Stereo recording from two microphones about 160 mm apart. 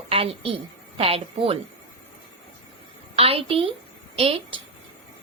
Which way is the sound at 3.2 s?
35° right (ahead or behind).